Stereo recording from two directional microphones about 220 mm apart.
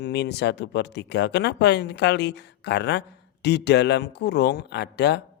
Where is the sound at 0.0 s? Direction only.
50° left (ahead or behind).